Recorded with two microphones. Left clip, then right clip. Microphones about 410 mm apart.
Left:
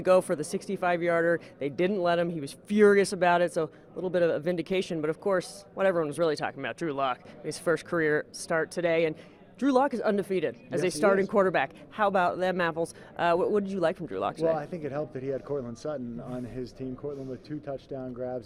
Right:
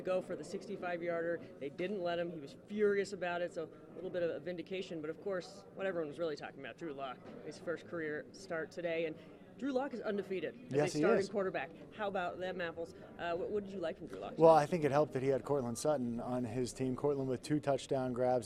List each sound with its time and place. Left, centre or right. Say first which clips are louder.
0.0 s speech: left 14 dB; left
14.4 s a man's voice: right 6 dB; centre
16.7 s a man's voice: right 4 dB; centre